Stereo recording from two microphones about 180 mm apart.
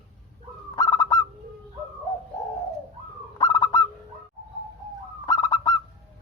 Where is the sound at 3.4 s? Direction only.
20° left (ahead or behind).